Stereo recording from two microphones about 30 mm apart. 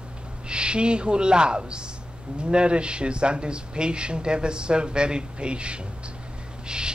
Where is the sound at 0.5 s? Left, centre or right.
Right.